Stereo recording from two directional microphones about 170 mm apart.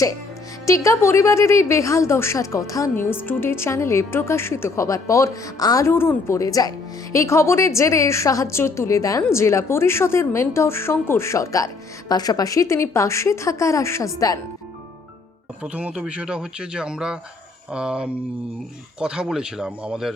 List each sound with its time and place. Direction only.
0.6 s a woman's voice: 15° left (ahead or behind)
15.6 s speech: 10° right (ahead or behind)